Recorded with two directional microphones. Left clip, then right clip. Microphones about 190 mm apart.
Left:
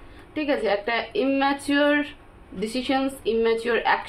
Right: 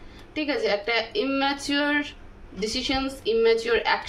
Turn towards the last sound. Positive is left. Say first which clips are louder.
# right 1 dB
turn(degrees=55)  # may be behind; listen again after turning